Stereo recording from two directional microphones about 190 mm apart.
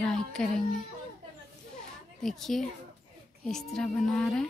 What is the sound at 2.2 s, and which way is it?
A woman's voice, centre (ahead or behind).